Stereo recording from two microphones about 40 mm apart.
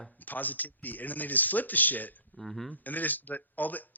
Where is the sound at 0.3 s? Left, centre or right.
Left.